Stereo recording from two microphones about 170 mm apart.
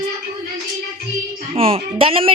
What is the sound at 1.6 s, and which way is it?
Speech, 35° right (ahead or behind).